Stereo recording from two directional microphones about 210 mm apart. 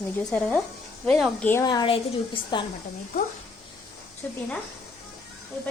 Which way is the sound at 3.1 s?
40° left (ahead or behind).